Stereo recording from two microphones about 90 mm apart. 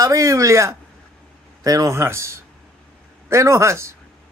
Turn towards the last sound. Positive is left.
turn(degrees=-30)  # may be behind; listen again after turning